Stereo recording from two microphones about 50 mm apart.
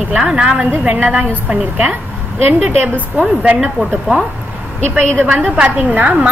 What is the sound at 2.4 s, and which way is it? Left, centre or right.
A woman's voice, right.